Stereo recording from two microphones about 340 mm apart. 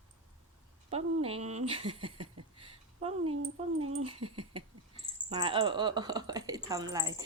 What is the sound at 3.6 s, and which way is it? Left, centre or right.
Speech, centre.